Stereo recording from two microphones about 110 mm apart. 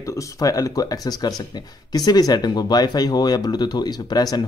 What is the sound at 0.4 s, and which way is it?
Speech, 30° left (ahead or behind).